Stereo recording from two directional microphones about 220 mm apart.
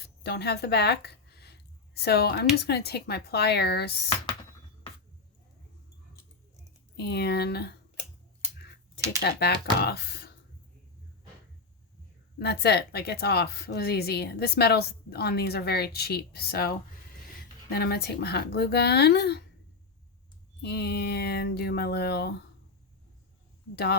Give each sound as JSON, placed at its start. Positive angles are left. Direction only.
{"t": 0.0, "sound": "a sound", "side_deg": 45}
{"t": 2.6, "sound": "speech", "side_deg": 45}
{"t": 6.9, "sound": "speech", "side_deg": 45}
{"t": 9.2, "sound": "speech", "side_deg": 45}
{"t": 12.4, "sound": "speech", "side_deg": 50}
{"t": 20.6, "sound": "speech", "side_deg": 50}
{"t": 23.7, "sound": "speech", "side_deg": 50}